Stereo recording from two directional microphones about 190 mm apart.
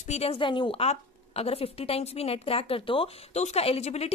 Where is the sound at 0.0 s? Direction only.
35° left (ahead or behind).